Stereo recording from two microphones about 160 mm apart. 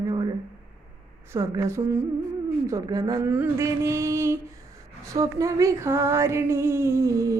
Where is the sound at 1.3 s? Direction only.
20° right (ahead or behind).